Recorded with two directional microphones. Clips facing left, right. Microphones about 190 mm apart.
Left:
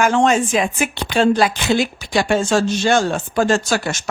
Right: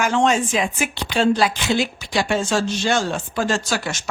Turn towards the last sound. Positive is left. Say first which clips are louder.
# left 5 dB
turn(degrees=50)  # may be behind; listen again after turning